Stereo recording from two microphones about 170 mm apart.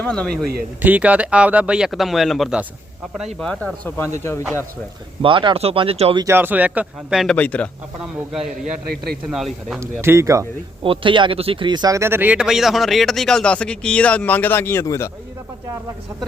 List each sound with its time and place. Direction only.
0.0 s speech: 5° left (ahead or behind)
0.8 s speech: 10° right (ahead or behind); by 4.4 s 15° left (ahead or behind)
5.2 s speech: 30° right (ahead or behind)
6.2 s speech: 10° right (ahead or behind); by 7.7 s 10° left (ahead or behind)
9.3 s speech: centre (ahead or behind)
9.8 s speech: 15° right (ahead or behind)
10.8 s speech: 30° right (ahead or behind); by 15.1 s 15° left (ahead or behind)